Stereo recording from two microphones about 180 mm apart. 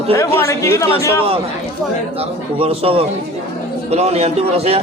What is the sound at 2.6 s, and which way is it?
A man's voice, 35° right (ahead or behind).